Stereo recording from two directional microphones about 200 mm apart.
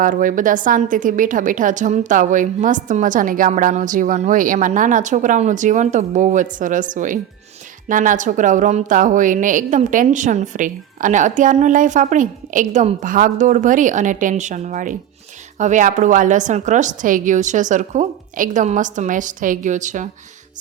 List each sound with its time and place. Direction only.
0.0 s a woman's voice: 40° right (ahead or behind)